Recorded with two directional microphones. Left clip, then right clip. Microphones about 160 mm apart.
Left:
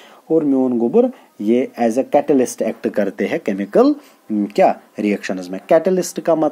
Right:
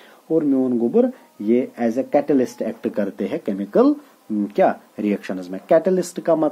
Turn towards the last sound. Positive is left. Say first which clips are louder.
# left 2 dB
turn(degrees=15)  # may be behind; listen again after turning